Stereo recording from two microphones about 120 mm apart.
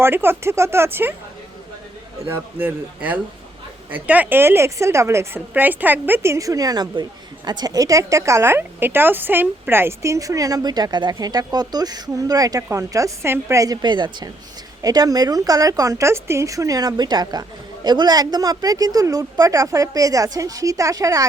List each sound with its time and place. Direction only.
0.0 s a woman's voice: 20° right (ahead or behind)
2.2 s a woman's voice: 20° right (ahead or behind)
13.8 s a woman's voice: 40° right (ahead or behind)